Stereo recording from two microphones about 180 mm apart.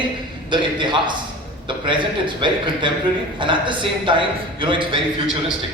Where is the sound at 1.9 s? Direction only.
25° right (ahead or behind).